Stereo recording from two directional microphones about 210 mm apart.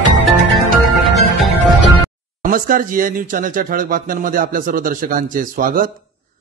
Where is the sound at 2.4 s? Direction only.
40° right (ahead or behind).